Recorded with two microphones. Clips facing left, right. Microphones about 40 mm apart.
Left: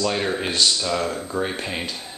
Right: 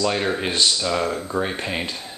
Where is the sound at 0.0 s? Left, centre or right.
Centre.